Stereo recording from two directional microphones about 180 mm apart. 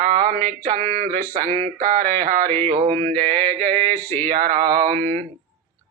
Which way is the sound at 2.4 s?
10° left (ahead or behind).